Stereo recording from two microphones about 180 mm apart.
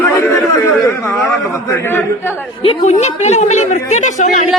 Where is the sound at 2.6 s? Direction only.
35° left (ahead or behind).